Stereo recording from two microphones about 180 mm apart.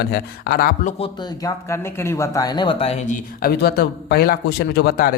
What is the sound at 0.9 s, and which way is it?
Speech, 30° left (ahead or behind).